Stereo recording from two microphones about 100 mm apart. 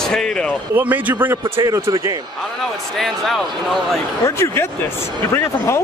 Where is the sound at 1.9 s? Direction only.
30° right (ahead or behind).